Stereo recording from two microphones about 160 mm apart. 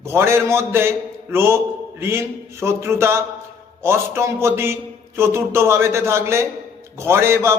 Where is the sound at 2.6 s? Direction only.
15° right (ahead or behind).